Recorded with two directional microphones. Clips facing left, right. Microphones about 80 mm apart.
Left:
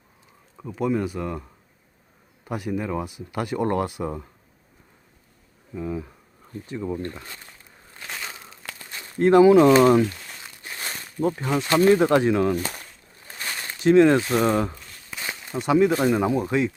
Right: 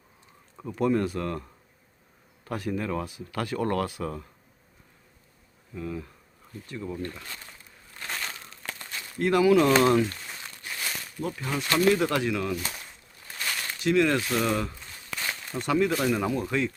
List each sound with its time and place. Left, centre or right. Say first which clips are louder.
0.8 s speech: left 1 dB; centre
5.7 s speech: left 5 dB; centre
7.9 s crushing: even; centre
8.9 s speech: left 8 dB; left
10.4 s crumpling: left 1 dB; left
11.5 s speech: left 5 dB; left
15.2 s speech: left 3 dB; centre